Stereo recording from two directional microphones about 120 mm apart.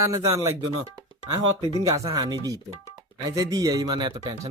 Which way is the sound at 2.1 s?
35° right (ahead or behind).